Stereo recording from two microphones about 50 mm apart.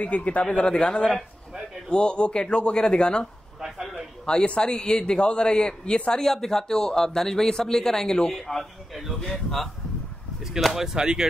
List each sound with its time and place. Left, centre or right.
0.0 s speech: left
3.6 s a sound: centre
4.3 s a man's voice: centre
10.6 s speech: centre